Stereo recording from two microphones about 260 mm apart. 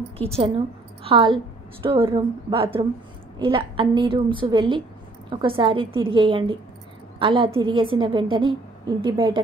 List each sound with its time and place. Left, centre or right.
0.2 s a woman's voice: right